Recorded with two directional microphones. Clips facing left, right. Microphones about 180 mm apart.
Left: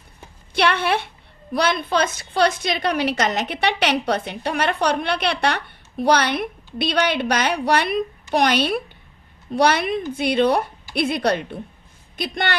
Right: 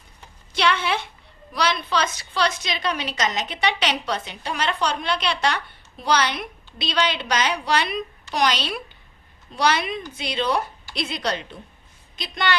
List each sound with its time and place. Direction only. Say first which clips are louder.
0.5 s a woman's voice: left 3 dB; 60° left (ahead or behind)